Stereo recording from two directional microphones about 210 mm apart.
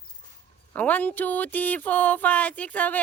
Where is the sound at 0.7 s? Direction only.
5° left (ahead or behind).